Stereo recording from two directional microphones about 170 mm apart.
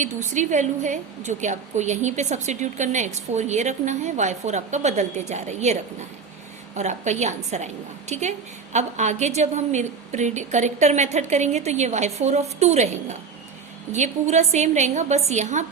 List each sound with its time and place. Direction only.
0.0 s a woman's voice: 45° right (ahead or behind)
6.7 s a woman's voice: 45° right (ahead or behind)